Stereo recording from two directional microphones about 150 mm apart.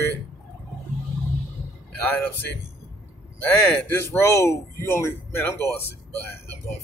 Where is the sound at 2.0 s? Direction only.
10° left (ahead or behind).